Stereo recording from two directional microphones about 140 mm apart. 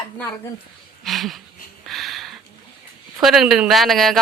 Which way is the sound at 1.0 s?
Centre (ahead or behind).